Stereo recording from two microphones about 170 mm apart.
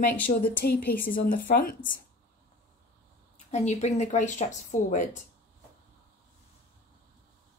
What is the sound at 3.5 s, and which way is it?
Speech, 40° left (ahead or behind).